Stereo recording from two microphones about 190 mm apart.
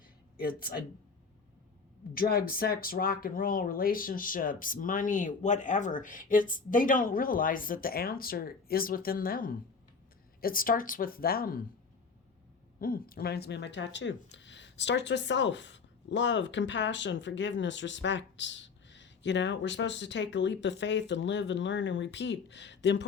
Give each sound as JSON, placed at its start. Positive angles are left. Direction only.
{"t": 0.3, "sound": "speech", "side_deg": 50}
{"t": 2.1, "sound": "speech", "side_deg": 50}
{"t": 12.8, "sound": "speech", "side_deg": 50}